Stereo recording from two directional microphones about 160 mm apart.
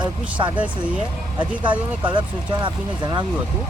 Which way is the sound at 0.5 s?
10° right (ahead or behind).